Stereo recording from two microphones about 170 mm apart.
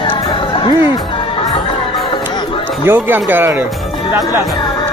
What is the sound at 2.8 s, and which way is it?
Speech, 15° right (ahead or behind).